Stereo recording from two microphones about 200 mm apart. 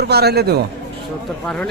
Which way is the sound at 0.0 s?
55° right (ahead or behind).